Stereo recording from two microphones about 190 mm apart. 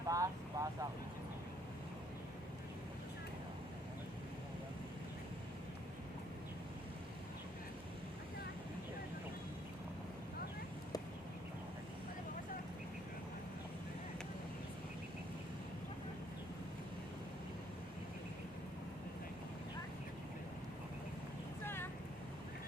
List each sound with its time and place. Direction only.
0.1 s speech: 20° right (ahead or behind)